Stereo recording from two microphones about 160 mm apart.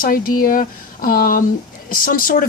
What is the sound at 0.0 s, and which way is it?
A woman's voice, 60° left (ahead or behind).